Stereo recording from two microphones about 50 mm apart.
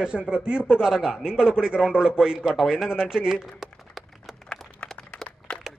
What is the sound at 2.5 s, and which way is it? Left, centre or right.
Speech, centre.